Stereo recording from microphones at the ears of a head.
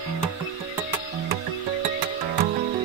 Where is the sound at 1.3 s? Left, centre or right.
Right.